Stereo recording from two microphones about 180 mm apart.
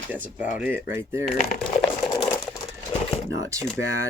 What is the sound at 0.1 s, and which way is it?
Speech, 10° right (ahead or behind).